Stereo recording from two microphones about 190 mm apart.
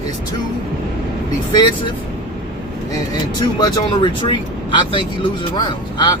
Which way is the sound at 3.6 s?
25° left (ahead or behind).